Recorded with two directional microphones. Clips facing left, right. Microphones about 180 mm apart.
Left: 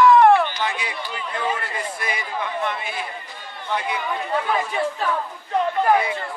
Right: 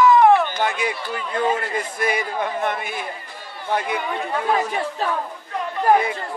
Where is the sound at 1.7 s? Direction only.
45° right (ahead or behind).